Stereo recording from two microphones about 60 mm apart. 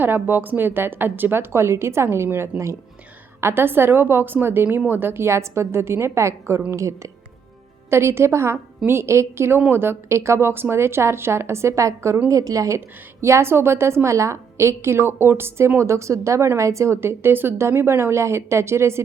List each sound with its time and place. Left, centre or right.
0.0 s a woman's voice: right
7.9 s a woman's voice: right
12.3 s speech: right
13.2 s a woman's voice: right
17.0 s a woman's voice: right